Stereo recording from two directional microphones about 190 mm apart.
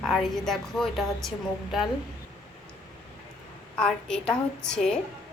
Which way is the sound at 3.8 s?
5° left (ahead or behind).